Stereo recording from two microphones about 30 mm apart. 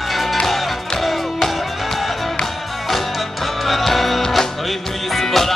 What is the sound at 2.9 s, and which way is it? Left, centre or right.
Music, centre.